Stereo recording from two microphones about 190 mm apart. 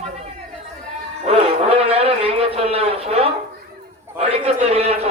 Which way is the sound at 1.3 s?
30° right (ahead or behind).